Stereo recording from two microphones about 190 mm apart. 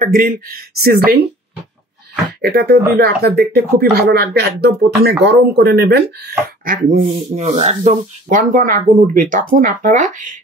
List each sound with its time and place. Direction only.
0.0 s speech: 50° right (ahead or behind)
2.4 s speech: 55° right (ahead or behind)
6.6 s speech: 45° right (ahead or behind)
7.0 s speech: 30° right (ahead or behind)